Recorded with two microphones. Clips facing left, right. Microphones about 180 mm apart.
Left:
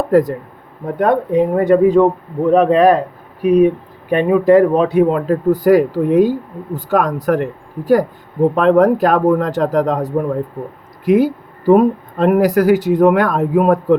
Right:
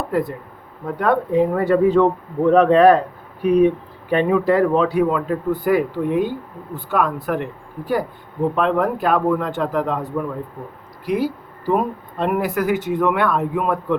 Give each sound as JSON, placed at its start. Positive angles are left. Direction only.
{"t": 0.1, "sound": "speech", "side_deg": 40}
{"t": 0.9, "sound": "speech", "side_deg": 20}
{"t": 5.1, "sound": "speech", "side_deg": 45}
{"t": 11.0, "sound": "speech", "side_deg": 50}